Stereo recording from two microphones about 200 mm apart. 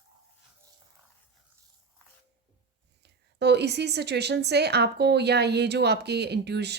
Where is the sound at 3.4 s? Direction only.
55° right (ahead or behind).